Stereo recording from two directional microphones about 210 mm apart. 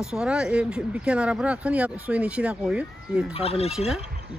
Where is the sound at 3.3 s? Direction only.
30° left (ahead or behind).